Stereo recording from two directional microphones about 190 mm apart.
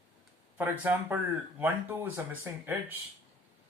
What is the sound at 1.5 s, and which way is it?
Speech, 10° right (ahead or behind).